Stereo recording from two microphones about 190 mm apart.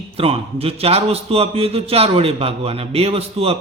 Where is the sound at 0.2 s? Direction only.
30° right (ahead or behind).